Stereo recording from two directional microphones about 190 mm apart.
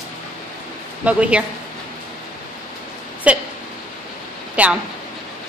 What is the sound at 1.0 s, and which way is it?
Speech, 5° right (ahead or behind).